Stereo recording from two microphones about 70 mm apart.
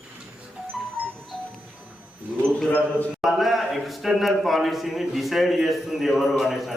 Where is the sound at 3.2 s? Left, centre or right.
Centre.